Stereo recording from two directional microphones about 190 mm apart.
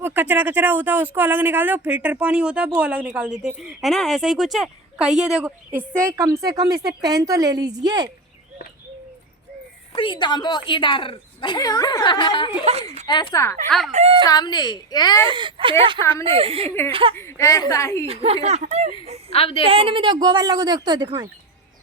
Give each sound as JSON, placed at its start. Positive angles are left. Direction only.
{"t": 0.0, "sound": "a woman's voice", "side_deg": -10}
{"t": 9.9, "sound": "a woman's voice", "side_deg": 25}
{"t": 13.9, "sound": "a woman's voice", "side_deg": -30}
{"t": 14.3, "sound": "a woman's voice", "side_deg": 20}
{"t": 15.2, "sound": "a woman's voice", "side_deg": -25}
{"t": 17.2, "sound": "a woman's voice", "side_deg": 15}
{"t": 18.0, "sound": "a woman's voice", "side_deg": -30}
{"t": 19.3, "sound": "a woman's voice", "side_deg": 30}
{"t": 19.6, "sound": "a woman's voice", "side_deg": -30}